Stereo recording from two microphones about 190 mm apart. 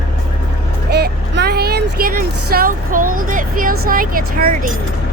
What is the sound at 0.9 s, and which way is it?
Speech, 60° right (ahead or behind).